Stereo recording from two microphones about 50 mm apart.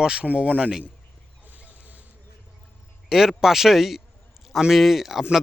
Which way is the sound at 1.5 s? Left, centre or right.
Left.